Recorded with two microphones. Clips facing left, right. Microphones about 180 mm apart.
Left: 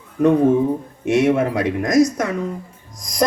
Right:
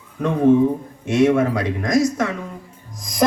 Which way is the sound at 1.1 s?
20° left (ahead or behind).